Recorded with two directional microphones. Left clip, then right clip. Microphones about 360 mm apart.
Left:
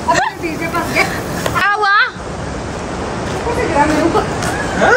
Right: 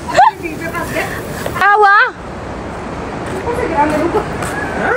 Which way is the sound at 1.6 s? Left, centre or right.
Centre.